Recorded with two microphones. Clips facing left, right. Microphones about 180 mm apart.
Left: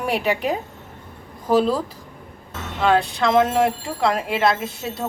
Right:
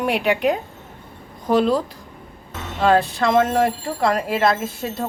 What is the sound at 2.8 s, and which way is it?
Speech, centre (ahead or behind).